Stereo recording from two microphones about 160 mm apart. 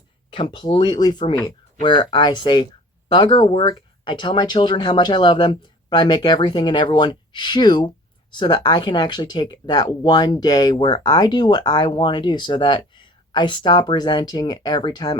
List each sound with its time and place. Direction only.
0.3 s speech: 30° left (ahead or behind)